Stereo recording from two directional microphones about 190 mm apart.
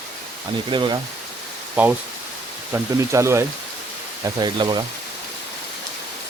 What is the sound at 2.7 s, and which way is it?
Speech, 15° right (ahead or behind).